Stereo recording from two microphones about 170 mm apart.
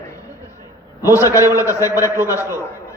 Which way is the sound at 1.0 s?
20° left (ahead or behind).